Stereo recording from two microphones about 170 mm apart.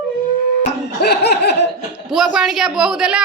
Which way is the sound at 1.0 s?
75° left (ahead or behind).